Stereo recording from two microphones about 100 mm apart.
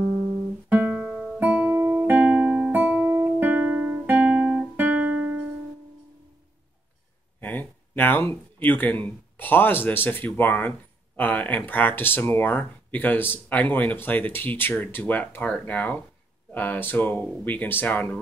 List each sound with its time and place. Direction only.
0.7 s guitar: 15° right (ahead or behind)
0.9 s guitar: centre (ahead or behind)
1.4 s music: 20° right (ahead or behind)
7.3 s speech: 20° left (ahead or behind)